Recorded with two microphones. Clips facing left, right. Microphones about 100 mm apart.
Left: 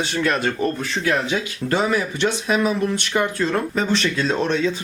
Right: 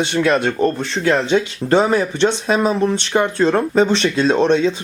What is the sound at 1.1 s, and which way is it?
Speech, 25° right (ahead or behind).